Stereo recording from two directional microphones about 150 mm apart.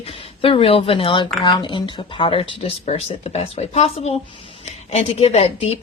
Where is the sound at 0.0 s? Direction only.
40° left (ahead or behind).